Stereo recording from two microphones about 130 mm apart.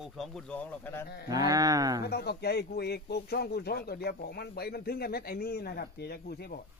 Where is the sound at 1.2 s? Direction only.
30° right (ahead or behind).